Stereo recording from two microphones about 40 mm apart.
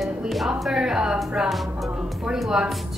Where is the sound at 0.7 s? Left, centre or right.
Centre.